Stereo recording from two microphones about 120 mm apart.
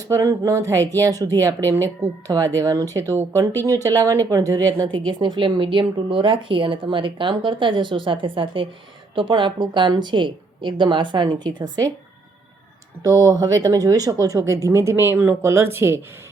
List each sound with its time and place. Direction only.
0.0 s speech: 25° right (ahead or behind)
5.0 s a woman's voice: 40° right (ahead or behind)
13.0 s speech: 30° right (ahead or behind)